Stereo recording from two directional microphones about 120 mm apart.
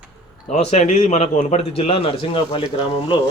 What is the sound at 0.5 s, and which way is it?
A man's voice, 65° left (ahead or behind).